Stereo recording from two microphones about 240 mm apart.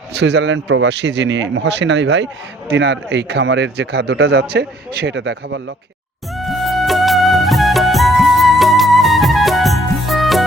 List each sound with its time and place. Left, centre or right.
0.1 s a man's voice: right
6.3 s music: centre